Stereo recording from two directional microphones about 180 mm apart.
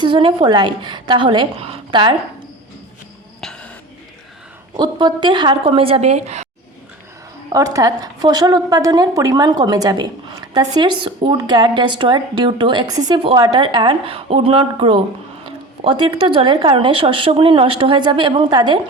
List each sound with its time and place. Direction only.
0.0 s a woman's voice: 25° right (ahead or behind)
3.4 s music: 5° left (ahead or behind)
4.8 s a woman's voice: 25° right (ahead or behind)
7.5 s a woman's voice: 20° right (ahead or behind)